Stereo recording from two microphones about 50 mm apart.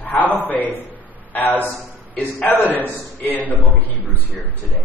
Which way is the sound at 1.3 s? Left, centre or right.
Left.